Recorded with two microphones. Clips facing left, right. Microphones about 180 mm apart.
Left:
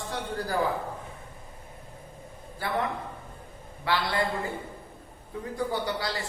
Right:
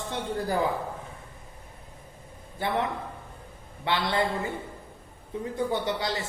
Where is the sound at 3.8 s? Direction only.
20° right (ahead or behind).